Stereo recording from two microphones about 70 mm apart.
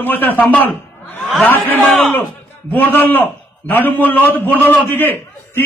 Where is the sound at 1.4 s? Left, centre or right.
Left.